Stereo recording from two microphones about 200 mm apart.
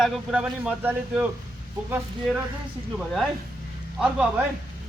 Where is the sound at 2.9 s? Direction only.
Centre (ahead or behind).